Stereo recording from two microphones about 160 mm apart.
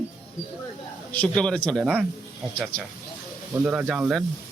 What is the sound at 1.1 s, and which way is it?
Speech, 10° left (ahead or behind).